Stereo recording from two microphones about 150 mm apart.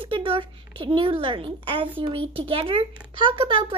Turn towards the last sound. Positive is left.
turn(degrees=-35)  # may be behind; listen again after turning